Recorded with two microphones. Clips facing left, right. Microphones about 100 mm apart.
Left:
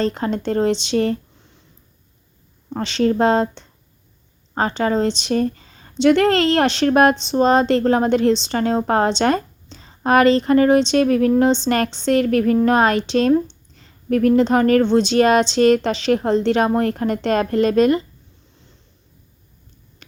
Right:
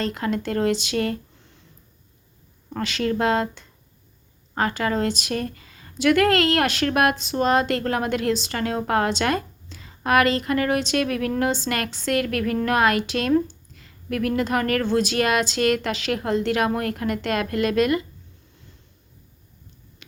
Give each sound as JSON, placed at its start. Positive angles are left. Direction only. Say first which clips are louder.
{"t": 0.0, "sound": "speech", "louder": "left 4 dB", "side_deg": 30}
{"t": 2.6, "sound": "speech", "louder": "left 6 dB", "side_deg": 25}
{"t": 20.0, "sound": "finger snapping", "louder": "left 2 dB", "side_deg": 40}